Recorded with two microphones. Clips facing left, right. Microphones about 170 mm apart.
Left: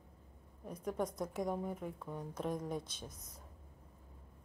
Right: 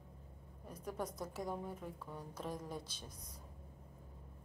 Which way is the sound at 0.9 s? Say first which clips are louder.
Left 5 dB; 5° right (ahead or behind).